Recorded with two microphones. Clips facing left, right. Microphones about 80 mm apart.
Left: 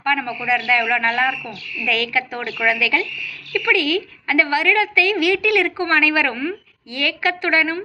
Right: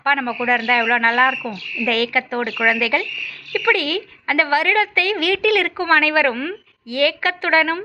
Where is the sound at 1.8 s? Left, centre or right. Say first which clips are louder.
Right 2 dB; right.